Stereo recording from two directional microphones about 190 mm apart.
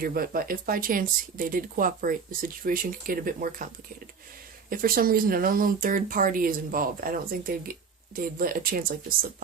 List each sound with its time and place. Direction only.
0.0 s speech: 50° right (ahead or behind)
4.7 s speech: 50° right (ahead or behind)